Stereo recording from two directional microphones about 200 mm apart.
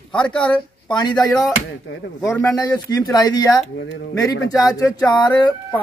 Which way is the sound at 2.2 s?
15° left (ahead or behind).